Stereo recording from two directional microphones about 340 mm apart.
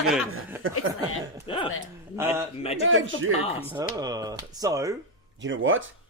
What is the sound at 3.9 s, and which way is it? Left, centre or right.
Speech, centre.